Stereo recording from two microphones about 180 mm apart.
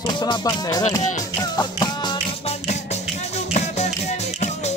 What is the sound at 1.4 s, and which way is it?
Music, 25° left (ahead or behind).